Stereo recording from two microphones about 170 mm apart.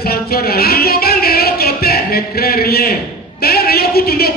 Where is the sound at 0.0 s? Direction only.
65° left (ahead or behind).